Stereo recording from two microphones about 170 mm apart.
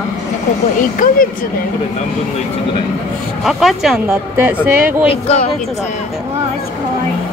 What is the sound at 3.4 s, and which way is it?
Speech, centre (ahead or behind).